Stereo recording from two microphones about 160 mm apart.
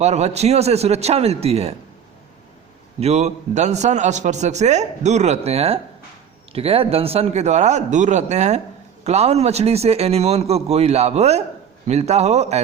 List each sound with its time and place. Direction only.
0.0 s a man's voice: 45° right (ahead or behind)
3.0 s a man's voice: 45° right (ahead or behind)